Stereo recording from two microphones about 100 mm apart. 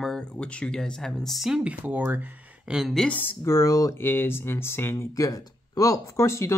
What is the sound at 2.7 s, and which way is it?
Speech, centre (ahead or behind).